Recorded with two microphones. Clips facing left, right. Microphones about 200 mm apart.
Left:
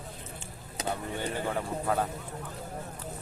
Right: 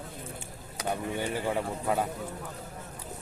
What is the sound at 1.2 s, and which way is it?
Speech, 10° right (ahead or behind).